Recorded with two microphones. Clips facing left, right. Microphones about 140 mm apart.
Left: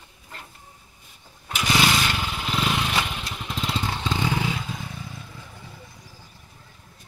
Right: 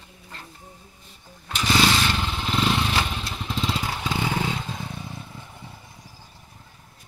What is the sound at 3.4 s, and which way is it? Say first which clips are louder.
Vehicle: right 1 dB; centre (ahead or behind).